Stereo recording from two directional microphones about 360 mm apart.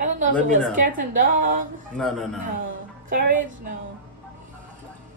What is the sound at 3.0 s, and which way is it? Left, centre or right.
Speech, right.